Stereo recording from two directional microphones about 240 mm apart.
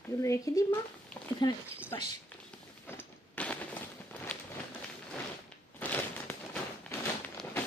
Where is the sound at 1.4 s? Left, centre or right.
Centre.